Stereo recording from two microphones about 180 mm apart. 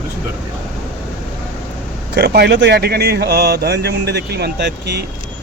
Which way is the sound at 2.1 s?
65° right (ahead or behind).